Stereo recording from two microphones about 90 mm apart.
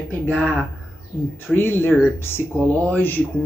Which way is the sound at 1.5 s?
25° left (ahead or behind).